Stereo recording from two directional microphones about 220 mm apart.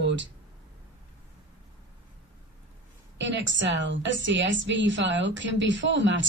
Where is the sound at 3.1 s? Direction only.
55° right (ahead or behind).